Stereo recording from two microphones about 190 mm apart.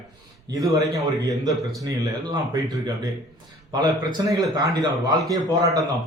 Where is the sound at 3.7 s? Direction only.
25° right (ahead or behind).